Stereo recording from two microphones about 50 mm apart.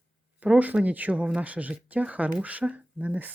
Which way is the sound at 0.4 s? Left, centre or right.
Right.